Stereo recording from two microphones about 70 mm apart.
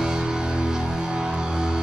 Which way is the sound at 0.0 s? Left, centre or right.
Centre.